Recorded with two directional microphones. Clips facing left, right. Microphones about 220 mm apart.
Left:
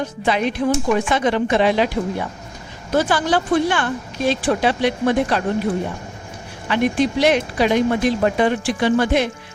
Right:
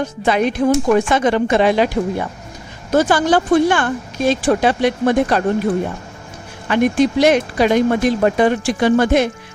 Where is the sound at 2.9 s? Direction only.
45° right (ahead or behind).